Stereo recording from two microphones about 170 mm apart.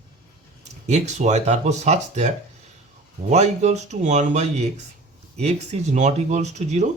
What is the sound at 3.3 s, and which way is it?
Speech, 40° right (ahead or behind).